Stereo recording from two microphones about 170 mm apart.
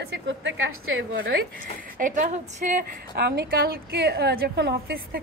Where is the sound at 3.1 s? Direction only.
75° right (ahead or behind).